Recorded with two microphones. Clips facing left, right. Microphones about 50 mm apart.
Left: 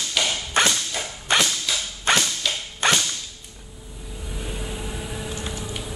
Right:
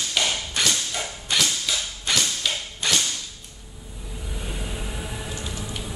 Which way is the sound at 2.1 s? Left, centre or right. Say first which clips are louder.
Left 4 dB; left.